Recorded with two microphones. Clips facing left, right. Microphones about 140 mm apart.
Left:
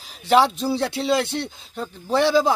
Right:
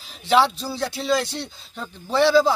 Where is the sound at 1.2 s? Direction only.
60° left (ahead or behind).